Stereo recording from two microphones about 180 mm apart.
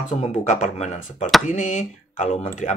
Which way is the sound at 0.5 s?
45° left (ahead or behind).